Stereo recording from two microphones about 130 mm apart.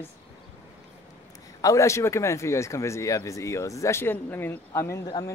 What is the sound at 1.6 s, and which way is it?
Speech, 25° left (ahead or behind).